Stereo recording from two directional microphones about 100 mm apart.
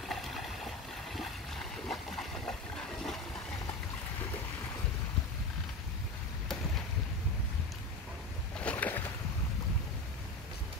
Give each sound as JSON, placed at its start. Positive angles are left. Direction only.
{"t": 0.0, "sound": "boat", "side_deg": 0}
{"t": 8.5, "sound": "boat", "side_deg": 15}